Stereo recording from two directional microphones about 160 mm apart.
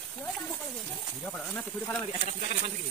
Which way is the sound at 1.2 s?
Centre (ahead or behind).